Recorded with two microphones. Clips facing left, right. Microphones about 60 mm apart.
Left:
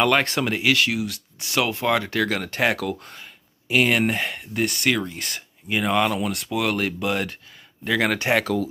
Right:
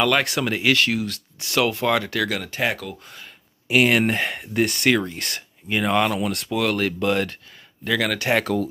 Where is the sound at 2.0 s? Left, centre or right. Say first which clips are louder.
Left 1 dB; left.